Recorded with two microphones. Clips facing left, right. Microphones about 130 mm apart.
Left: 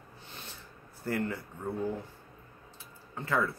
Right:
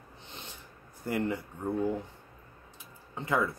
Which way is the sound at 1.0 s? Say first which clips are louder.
Right 2 dB; 15° right (ahead or behind).